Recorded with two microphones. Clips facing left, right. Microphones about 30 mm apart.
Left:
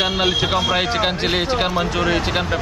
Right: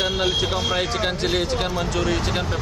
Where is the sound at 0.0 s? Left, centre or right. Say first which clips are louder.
Left 3 dB; left.